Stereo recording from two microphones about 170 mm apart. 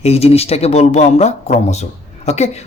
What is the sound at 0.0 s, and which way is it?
Speech, 35° left (ahead or behind).